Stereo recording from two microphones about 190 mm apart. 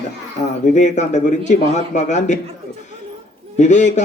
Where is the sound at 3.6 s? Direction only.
40° left (ahead or behind).